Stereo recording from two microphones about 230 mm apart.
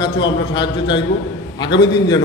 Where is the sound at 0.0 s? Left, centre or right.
Centre.